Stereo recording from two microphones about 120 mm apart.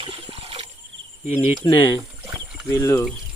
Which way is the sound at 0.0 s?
50° right (ahead or behind).